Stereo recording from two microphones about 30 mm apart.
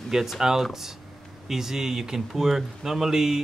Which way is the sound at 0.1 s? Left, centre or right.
Centre.